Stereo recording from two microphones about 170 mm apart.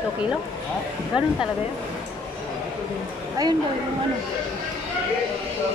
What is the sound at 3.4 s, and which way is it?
Speech, 20° right (ahead or behind).